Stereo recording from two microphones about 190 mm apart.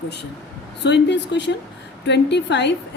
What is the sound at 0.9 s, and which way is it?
A woman's voice, 65° left (ahead or behind).